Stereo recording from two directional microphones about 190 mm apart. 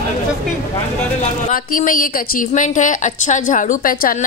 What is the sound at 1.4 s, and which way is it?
Speech, 45° left (ahead or behind).